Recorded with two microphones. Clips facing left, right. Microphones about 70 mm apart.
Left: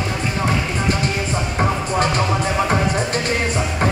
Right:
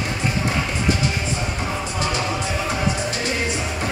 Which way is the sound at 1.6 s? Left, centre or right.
Left.